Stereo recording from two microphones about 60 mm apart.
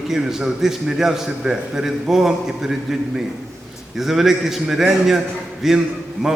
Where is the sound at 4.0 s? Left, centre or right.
Centre.